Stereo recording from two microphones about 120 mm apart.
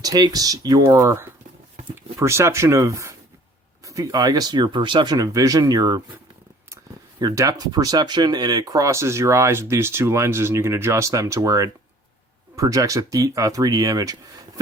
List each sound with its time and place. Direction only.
0.0 s speech: 35° right (ahead or behind)
7.2 s speech: 30° right (ahead or behind)